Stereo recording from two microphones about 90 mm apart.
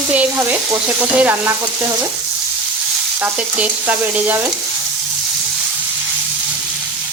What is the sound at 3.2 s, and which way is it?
Stir, 20° right (ahead or behind).